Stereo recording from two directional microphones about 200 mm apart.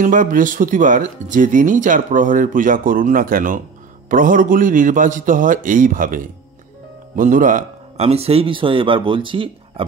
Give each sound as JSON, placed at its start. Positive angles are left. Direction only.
{"t": 0.0, "sound": "a man's voice", "side_deg": -40}